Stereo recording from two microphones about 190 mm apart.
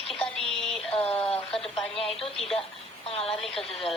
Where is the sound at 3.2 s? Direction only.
Centre (ahead or behind).